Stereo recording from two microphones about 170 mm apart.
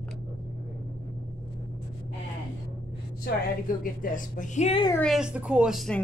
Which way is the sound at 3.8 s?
55° left (ahead or behind).